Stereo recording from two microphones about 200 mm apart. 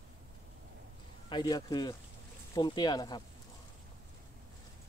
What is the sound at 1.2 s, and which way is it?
Speech, 20° left (ahead or behind).